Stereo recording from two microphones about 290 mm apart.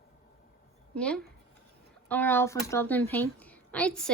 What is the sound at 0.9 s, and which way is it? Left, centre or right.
Speech, centre.